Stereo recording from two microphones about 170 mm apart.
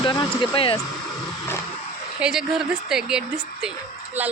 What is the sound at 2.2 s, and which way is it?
A woman's voice, 5° right (ahead or behind).